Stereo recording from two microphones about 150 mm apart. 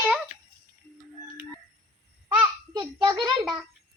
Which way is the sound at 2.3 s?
30° right (ahead or behind).